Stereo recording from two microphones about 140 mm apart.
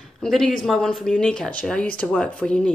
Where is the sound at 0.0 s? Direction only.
Centre (ahead or behind).